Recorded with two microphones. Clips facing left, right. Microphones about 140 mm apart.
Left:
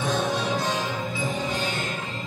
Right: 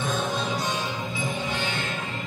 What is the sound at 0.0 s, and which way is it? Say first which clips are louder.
Music: left 2 dB; 90° left.